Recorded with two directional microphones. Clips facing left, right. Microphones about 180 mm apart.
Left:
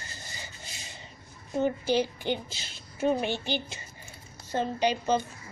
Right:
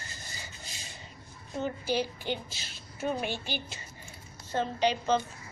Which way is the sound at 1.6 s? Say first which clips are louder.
Left 5 dB; 20° left (ahead or behind).